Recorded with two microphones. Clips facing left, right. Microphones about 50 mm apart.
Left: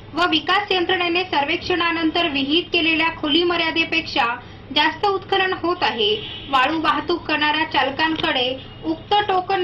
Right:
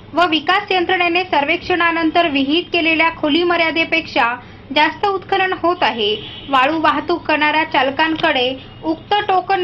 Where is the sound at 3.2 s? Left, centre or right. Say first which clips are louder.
Right 4 dB; right.